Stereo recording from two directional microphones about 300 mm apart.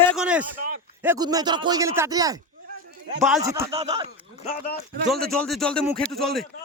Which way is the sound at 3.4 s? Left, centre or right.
Centre.